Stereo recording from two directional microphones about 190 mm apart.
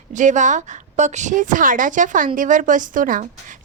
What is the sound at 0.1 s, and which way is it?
A woman's voice, 40° right (ahead or behind).